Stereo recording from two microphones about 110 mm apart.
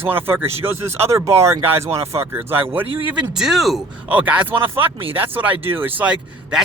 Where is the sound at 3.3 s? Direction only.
5° right (ahead or behind).